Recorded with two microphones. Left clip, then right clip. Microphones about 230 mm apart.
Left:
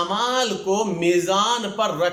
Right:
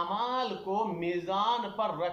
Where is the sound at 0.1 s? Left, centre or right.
Left.